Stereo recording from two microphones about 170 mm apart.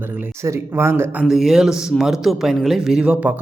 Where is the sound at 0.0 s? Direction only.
10° right (ahead or behind).